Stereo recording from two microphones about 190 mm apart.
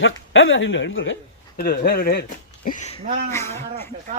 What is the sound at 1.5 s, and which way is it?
Speech, 55° left (ahead or behind).